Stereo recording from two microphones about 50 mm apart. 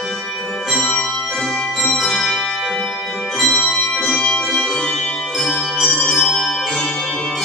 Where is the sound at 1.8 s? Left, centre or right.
Centre.